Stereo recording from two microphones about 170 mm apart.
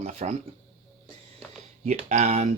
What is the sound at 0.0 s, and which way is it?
Speech, 40° right (ahead or behind).